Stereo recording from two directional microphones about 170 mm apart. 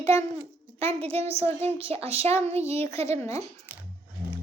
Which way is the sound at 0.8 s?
35° right (ahead or behind).